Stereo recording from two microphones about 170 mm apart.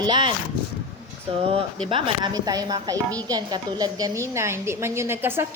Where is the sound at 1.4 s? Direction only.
35° right (ahead or behind).